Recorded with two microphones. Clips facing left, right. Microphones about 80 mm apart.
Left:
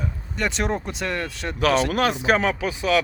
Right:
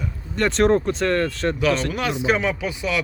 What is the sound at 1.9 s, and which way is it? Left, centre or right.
Speech, left.